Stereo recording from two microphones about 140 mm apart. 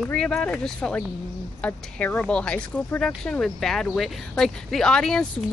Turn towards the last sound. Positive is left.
turn(degrees=5)  # may be behind; listen again after turning